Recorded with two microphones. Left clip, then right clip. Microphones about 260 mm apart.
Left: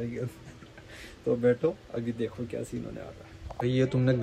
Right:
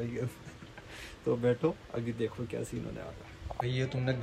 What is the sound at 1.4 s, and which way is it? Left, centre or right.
Speech, centre.